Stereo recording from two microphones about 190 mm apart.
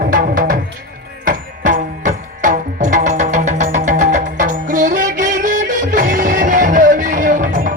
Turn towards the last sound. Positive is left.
turn(degrees=-45)  # may be behind; listen again after turning